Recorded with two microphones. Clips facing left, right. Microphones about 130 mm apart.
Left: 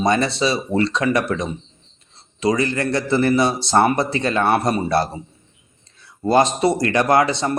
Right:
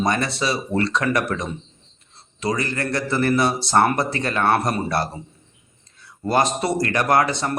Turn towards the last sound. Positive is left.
turn(degrees=25)  # may be behind; listen again after turning